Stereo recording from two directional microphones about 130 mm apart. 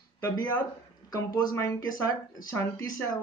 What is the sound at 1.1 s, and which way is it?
Speech, 30° left (ahead or behind).